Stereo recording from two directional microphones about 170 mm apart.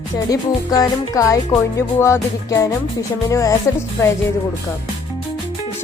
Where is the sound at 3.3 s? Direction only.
20° left (ahead or behind).